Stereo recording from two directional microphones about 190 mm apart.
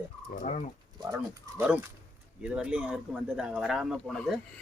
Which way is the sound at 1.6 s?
5° right (ahead or behind).